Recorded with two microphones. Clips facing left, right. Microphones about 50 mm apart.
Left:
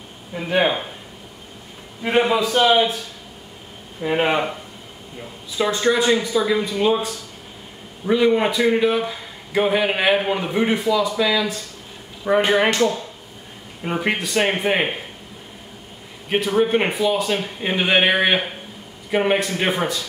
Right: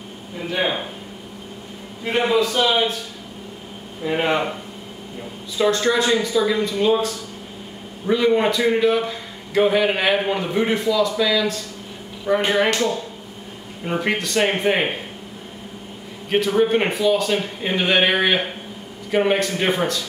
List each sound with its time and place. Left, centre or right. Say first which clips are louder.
0.6 s a man's voice: left 4 dB; centre
2.0 s a man's voice: left 1 dB; centre
4.0 s a man's voice: left 1 dB; centre
5.6 s a man's voice: even; centre
16.3 s a man's voice: right 1 dB; centre